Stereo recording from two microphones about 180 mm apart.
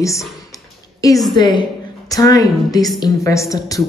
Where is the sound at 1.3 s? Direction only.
25° left (ahead or behind).